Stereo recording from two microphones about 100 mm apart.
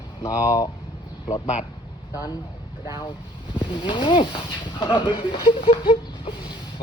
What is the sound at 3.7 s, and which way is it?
Speech, 50° left (ahead or behind).